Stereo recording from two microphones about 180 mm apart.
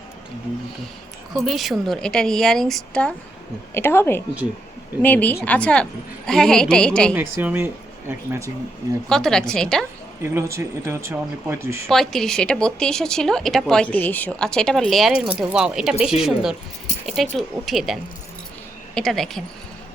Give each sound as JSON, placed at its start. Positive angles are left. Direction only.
{"t": 1.3, "sound": "a woman's voice", "side_deg": 0}
{"t": 7.1, "sound": "speech", "side_deg": -15}
{"t": 9.0, "sound": "a woman's voice", "side_deg": 5}
{"t": 10.2, "sound": "speech", "side_deg": -15}
{"t": 11.9, "sound": "a woman's voice", "side_deg": 0}